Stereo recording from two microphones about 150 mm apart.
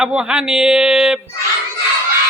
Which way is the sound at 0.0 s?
5° right (ahead or behind).